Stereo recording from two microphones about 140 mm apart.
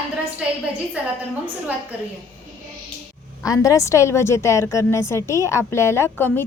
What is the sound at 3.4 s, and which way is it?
A woman's voice, 25° left (ahead or behind).